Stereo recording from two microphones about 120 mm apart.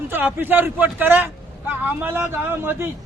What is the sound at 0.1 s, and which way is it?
Speech, 15° right (ahead or behind).